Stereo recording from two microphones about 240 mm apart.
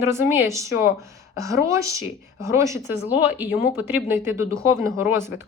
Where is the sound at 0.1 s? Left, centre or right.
Centre.